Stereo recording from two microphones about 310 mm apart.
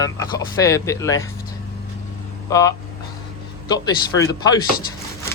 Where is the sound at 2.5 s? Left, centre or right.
Centre.